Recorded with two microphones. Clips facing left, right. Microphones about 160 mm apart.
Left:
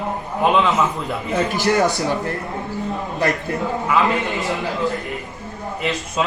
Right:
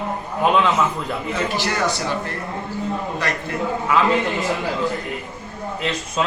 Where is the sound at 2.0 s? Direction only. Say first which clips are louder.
Left 3 dB; 20° left (ahead or behind).